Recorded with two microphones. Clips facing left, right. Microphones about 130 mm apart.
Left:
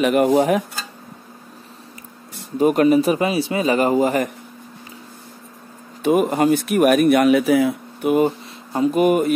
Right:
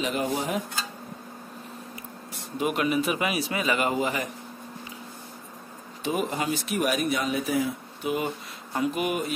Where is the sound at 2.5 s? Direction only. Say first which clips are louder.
Left 11 dB; 40° left (ahead or behind).